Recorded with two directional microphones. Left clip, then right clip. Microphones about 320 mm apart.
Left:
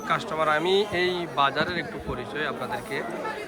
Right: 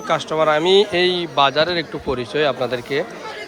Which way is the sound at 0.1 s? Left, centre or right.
Centre.